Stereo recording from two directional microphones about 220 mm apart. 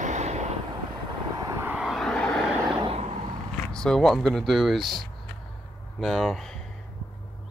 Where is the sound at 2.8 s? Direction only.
25° right (ahead or behind).